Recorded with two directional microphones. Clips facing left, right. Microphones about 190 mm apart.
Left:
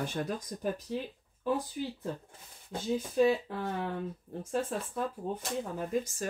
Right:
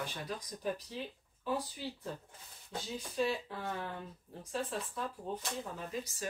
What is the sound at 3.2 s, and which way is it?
Speech, 50° left (ahead or behind).